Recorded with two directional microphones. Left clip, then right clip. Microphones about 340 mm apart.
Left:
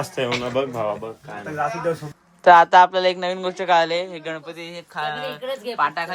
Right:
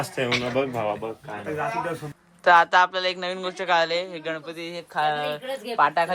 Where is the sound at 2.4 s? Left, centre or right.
Centre.